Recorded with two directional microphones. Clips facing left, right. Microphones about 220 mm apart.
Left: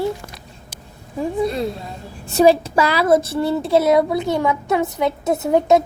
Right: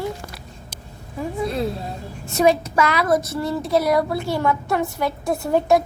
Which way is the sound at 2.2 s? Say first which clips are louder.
Left 4 dB; 35° left (ahead or behind).